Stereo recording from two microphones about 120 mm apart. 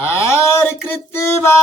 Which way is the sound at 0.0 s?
20° left (ahead or behind).